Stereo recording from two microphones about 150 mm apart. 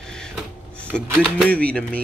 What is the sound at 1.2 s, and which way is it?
Speech, 5° left (ahead or behind).